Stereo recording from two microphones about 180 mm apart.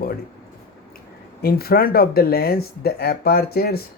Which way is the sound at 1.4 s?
60° left (ahead or behind).